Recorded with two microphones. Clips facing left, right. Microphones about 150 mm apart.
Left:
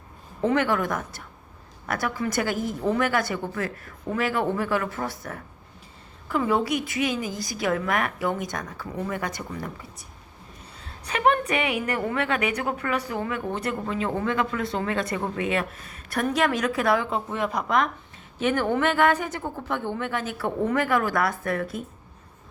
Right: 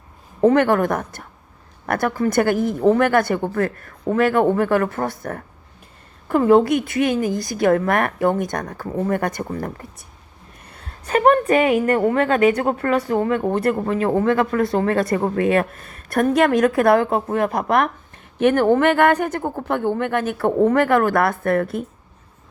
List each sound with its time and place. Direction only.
0.4 s a woman's voice: 50° right (ahead or behind)
10.6 s a woman's voice: 60° right (ahead or behind)